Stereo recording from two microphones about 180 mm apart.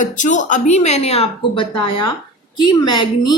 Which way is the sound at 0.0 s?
45° left (ahead or behind).